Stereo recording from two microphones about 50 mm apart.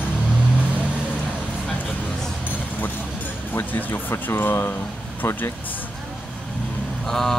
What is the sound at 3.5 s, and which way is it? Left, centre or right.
Speech, left.